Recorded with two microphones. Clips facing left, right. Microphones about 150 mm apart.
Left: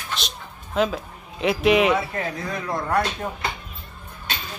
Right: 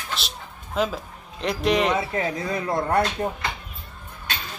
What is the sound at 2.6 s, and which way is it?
Speech, 30° right (ahead or behind).